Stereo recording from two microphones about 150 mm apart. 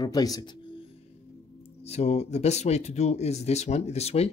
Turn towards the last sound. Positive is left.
turn(degrees=45)  # may be behind; listen again after turning